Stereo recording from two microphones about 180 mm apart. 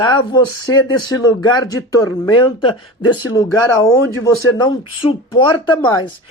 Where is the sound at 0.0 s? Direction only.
25° left (ahead or behind).